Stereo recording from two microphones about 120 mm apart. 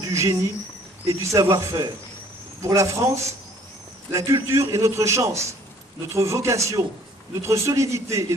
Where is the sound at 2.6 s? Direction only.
25° right (ahead or behind).